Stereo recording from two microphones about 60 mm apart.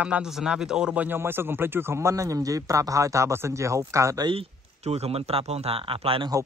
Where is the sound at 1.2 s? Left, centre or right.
Right.